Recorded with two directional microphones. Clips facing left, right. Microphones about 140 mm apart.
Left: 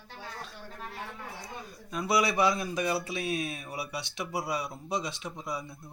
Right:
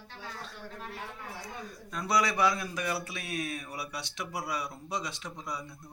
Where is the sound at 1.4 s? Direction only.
10° left (ahead or behind); by 4.7 s 30° left (ahead or behind).